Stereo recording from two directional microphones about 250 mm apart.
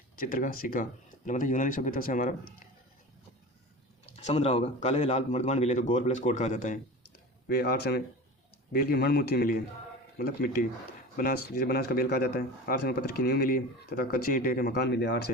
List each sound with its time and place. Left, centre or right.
0.2 s speech: left
4.0 s speech: left